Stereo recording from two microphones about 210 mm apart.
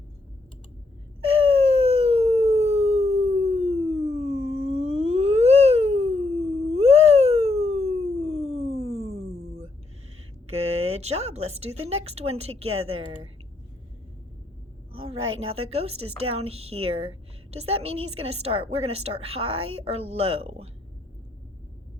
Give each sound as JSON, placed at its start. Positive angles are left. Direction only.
{"t": 1.2, "sound": "howl", "side_deg": -25}
{"t": 4.7, "sound": "a sound", "side_deg": -30}
{"t": 10.4, "sound": "a woman's voice", "side_deg": -30}
{"t": 15.4, "sound": "a woman's voice", "side_deg": -30}
{"t": 17.9, "sound": "a woman's voice", "side_deg": -85}
{"t": 18.2, "sound": "a woman's voice", "side_deg": -30}